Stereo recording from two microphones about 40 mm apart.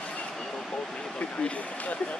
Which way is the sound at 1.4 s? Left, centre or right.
Left.